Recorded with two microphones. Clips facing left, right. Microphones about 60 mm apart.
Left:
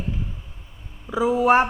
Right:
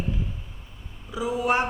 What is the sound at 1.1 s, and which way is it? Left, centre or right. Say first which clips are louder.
Speech: left 7 dB; left.